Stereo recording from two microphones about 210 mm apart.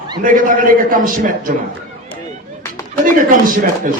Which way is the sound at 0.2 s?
40° right (ahead or behind).